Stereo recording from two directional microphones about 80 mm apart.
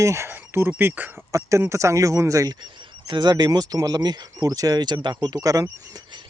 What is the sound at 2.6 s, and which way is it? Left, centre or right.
Speech, right.